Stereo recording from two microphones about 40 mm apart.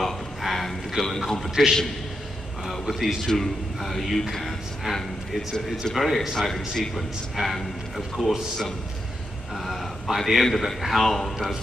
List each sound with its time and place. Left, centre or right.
0.0 s a sound: centre
1.5 s a man's voice: centre
2.9 s a man's voice: centre
3.3 s a man's voice: centre
9.6 s a man's voice: centre